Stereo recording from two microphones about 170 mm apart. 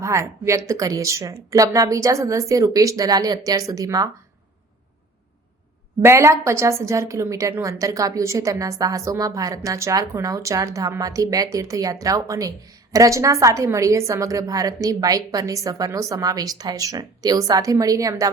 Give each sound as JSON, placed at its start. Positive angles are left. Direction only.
{"t": 0.0, "sound": "a woman's voice", "side_deg": -15}
{"t": 6.0, "sound": "a woman's voice", "side_deg": -15}